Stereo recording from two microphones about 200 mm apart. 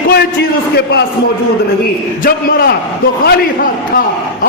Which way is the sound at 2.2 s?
50° left (ahead or behind).